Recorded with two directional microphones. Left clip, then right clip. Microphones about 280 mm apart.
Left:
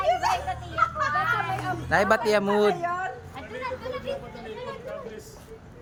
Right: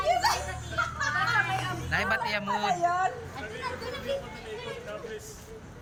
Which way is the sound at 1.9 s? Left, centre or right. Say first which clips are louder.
Left 7 dB; left.